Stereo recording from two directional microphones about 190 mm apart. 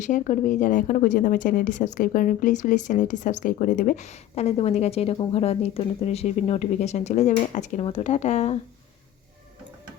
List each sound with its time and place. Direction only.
0.0 s a woman's voice: 40° left (ahead or behind)